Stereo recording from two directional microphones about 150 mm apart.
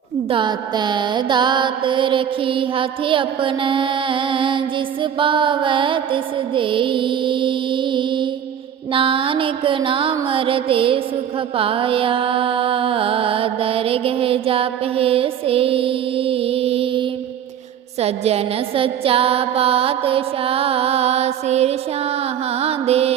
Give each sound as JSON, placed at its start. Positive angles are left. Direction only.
{"t": 0.3, "sound": "music", "side_deg": -30}
{"t": 22.5, "sound": "mantra", "side_deg": -45}